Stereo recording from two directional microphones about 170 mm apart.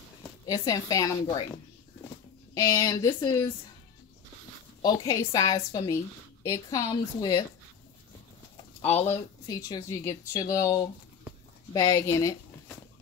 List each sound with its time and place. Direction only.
0.5 s a woman's voice: 20° left (ahead or behind)
2.5 s a woman's voice: 20° left (ahead or behind)
4.8 s a woman's voice: 20° left (ahead or behind)
9.0 s speech: 20° left (ahead or behind)